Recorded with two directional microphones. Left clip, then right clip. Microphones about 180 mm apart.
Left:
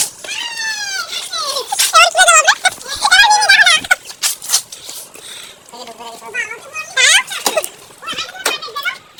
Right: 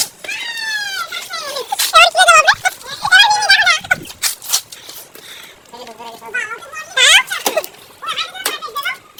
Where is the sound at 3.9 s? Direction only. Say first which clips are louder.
Left 2 dB; 15° left (ahead or behind).